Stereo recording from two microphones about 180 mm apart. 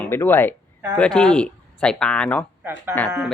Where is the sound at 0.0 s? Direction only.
10° left (ahead or behind).